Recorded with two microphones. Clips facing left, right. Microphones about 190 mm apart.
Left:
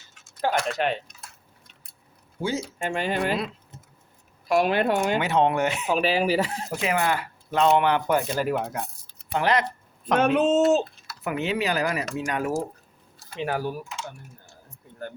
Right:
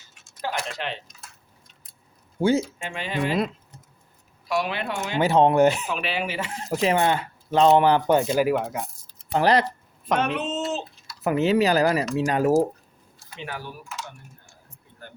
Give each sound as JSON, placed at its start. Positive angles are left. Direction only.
{"t": 0.4, "sound": "speech", "side_deg": 50}
{"t": 2.7, "sound": "speech", "side_deg": 45}
{"t": 4.4, "sound": "speech", "side_deg": 50}
{"t": 5.2, "sound": "speech", "side_deg": -35}
{"t": 5.9, "sound": "speech", "side_deg": 40}
{"t": 6.7, "sound": "speech", "side_deg": -35}
{"t": 8.4, "sound": "speech", "side_deg": 0}
{"t": 9.3, "sound": "speech", "side_deg": -35}
{"t": 10.2, "sound": "speech", "side_deg": 50}
{"t": 11.2, "sound": "speech", "side_deg": -40}
{"t": 13.1, "sound": "speech", "side_deg": 40}